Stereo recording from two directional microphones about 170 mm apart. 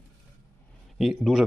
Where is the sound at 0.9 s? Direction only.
Centre (ahead or behind).